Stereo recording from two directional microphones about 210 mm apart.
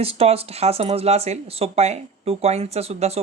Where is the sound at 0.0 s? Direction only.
30° right (ahead or behind).